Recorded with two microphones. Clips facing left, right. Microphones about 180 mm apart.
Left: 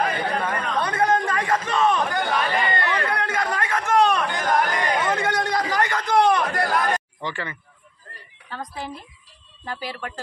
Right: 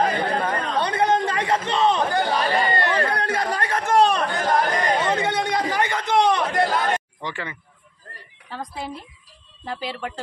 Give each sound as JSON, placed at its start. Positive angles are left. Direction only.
{"t": 0.0, "sound": "chatter", "side_deg": -25}
{"t": 9.8, "sound": "speech", "side_deg": -25}